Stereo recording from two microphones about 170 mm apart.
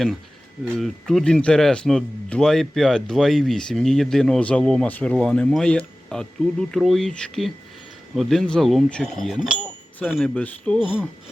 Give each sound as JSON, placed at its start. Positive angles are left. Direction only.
{"t": 0.8, "sound": "speech", "side_deg": 0}
{"t": 10.8, "sound": "speech", "side_deg": -5}